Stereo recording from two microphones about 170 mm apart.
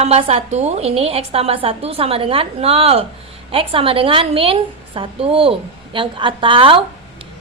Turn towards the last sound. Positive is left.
turn(degrees=-30)  # may be behind; listen again after turning